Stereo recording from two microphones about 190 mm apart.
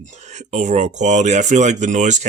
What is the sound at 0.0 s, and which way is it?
Speech, 40° right (ahead or behind).